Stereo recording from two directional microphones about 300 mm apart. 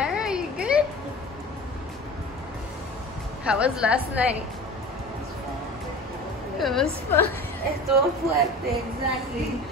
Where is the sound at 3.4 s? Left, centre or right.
Centre.